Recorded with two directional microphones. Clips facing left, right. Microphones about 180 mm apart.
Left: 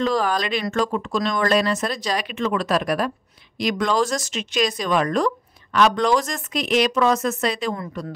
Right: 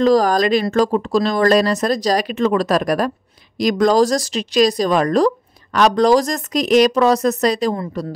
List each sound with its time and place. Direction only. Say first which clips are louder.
0.0 s speech: right 8 dB; 40° right (ahead or behind)